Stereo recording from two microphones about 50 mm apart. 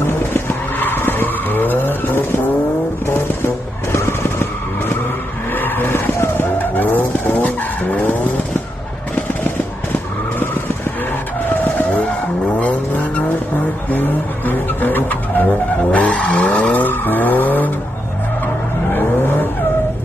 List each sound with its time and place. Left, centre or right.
0.0 s vehicle: left
3.1 s vehicle: left
5.5 s vehicle: left
11.8 s vehicle: left
15.9 s vehicle: left
18.9 s vehicle: left